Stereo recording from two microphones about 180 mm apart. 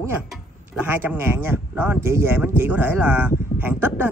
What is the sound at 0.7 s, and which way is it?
Speech, 10° right (ahead or behind).